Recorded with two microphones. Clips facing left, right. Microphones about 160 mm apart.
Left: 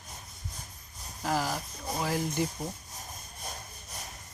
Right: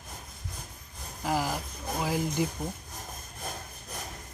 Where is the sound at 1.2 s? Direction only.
15° right (ahead or behind).